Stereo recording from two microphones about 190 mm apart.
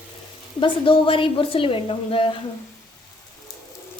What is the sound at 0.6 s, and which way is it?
A woman's voice, 25° left (ahead or behind).